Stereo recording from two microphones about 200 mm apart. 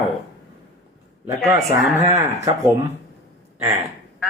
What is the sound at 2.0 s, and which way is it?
Speech, 35° right (ahead or behind).